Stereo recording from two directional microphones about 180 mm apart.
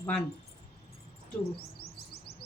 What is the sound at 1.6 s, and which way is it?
Chirp, 60° left (ahead or behind).